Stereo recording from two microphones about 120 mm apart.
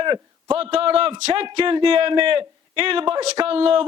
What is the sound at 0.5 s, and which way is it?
A man's voice, 55° right (ahead or behind).